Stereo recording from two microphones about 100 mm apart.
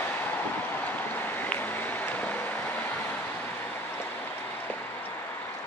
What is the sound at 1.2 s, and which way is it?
Vehicle, 20° left (ahead or behind).